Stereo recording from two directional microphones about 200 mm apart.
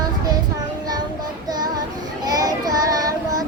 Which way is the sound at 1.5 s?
20° right (ahead or behind).